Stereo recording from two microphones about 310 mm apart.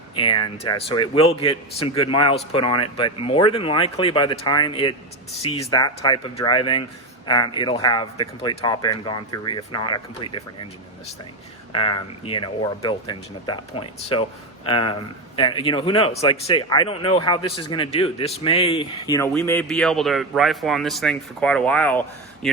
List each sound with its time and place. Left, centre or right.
0.2 s speech: centre
11.7 s speech: centre